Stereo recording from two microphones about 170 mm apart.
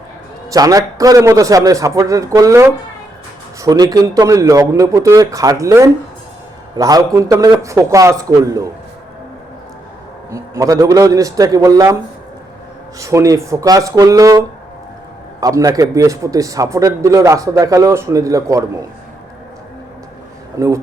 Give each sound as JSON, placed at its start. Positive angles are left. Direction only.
{"t": 0.5, "sound": "a man's voice", "side_deg": -20}
{"t": 10.3, "sound": "a man's voice", "side_deg": -20}
{"t": 13.0, "sound": "a man's voice", "side_deg": -20}
{"t": 20.6, "sound": "a man's voice", "side_deg": -20}